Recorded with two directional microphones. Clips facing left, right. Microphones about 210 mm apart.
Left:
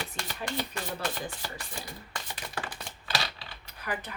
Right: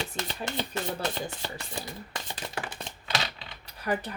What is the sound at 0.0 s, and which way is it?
Chopping, 25° right (ahead or behind).